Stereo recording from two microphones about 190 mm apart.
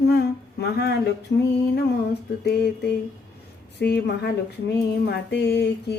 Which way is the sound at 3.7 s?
60° left (ahead or behind).